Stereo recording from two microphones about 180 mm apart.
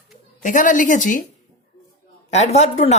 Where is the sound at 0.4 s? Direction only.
45° left (ahead or behind).